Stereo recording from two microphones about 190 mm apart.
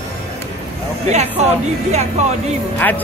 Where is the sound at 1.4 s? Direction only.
35° right (ahead or behind).